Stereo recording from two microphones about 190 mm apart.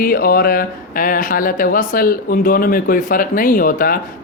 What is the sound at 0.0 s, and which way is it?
Speech, 50° left (ahead or behind).